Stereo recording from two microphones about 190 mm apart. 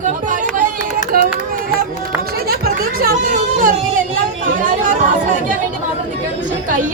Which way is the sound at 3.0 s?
45° right (ahead or behind).